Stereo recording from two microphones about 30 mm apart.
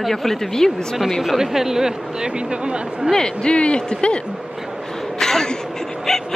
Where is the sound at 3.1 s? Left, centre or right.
Left.